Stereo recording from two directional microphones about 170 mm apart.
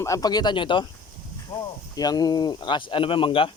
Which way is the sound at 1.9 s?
25° left (ahead or behind).